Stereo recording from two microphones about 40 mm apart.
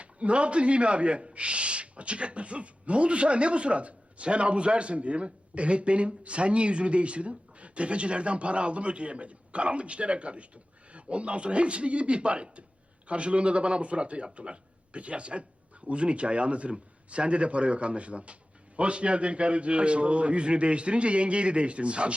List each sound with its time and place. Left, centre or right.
0.0 s a man's voice: right